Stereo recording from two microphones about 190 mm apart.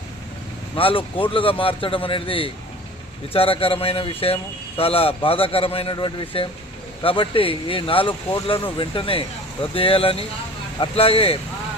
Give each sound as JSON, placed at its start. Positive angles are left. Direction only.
{"t": 0.8, "sound": "a man's voice", "side_deg": 25}